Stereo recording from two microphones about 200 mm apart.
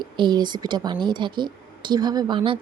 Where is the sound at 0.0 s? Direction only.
20° right (ahead or behind).